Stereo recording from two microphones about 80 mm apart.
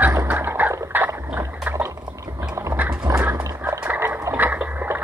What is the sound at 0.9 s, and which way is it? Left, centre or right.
Boat, right.